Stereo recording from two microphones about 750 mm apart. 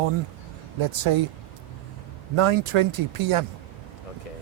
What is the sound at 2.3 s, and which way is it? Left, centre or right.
Speech, right.